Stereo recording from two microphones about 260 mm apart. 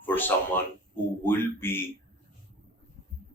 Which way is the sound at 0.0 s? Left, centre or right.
Centre.